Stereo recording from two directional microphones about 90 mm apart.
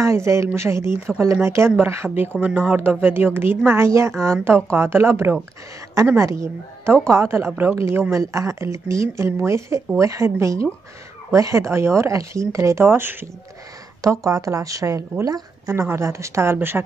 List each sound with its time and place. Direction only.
0.0 s a woman's voice: 30° right (ahead or behind)
15.7 s a woman's voice: 30° right (ahead or behind)